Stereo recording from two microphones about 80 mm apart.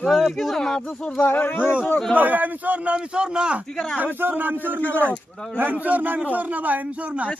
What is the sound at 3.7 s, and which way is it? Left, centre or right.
Speech, centre.